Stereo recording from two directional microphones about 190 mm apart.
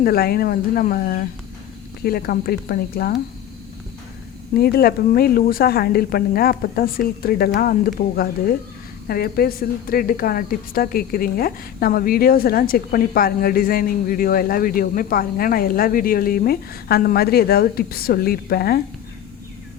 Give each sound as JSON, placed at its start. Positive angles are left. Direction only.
{"t": 0.0, "sound": "a woman's voice", "side_deg": 50}
{"t": 4.5, "sound": "a woman's voice", "side_deg": 55}